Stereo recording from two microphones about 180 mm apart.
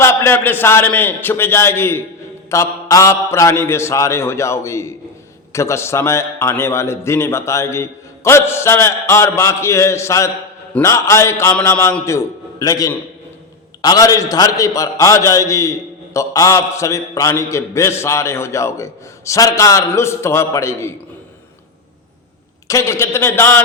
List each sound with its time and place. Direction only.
0.0 s a man's voice: 15° left (ahead or behind)
22.6 s a man's voice: 15° left (ahead or behind)